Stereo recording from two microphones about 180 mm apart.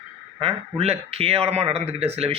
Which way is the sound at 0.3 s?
35° right (ahead or behind).